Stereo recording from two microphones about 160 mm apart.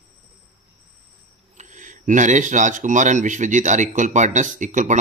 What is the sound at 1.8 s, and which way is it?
Speech, 50° right (ahead or behind).